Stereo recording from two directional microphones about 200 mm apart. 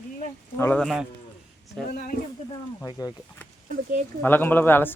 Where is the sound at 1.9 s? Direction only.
55° left (ahead or behind).